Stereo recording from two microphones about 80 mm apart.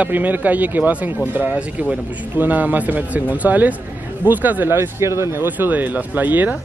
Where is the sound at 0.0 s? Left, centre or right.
Right.